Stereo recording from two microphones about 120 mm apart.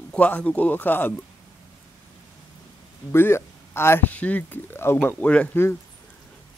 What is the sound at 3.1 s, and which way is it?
Speech, 20° left (ahead or behind).